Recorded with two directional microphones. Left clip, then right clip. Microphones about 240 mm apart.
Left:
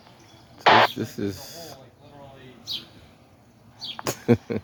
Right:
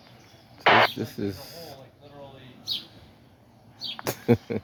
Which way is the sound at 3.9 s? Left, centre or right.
Centre.